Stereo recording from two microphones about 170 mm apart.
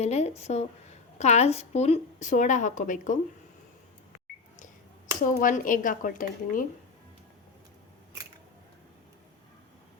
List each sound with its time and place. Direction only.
0.0 s a woman's voice: 40° left (ahead or behind)
5.2 s speech: 50° left (ahead or behind)